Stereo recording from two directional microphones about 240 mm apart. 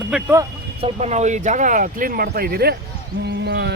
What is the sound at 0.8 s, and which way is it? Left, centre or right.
Speech, right.